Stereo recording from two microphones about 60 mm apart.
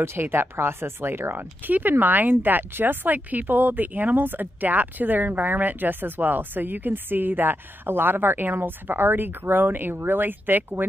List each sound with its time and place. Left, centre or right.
0.0 s speech: right